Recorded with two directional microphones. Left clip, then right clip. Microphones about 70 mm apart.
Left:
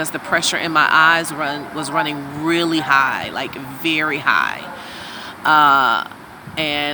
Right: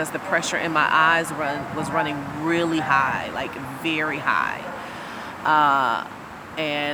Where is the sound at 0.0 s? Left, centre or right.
Left.